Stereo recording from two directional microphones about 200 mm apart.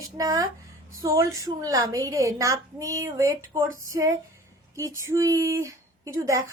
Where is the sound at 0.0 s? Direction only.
15° right (ahead or behind).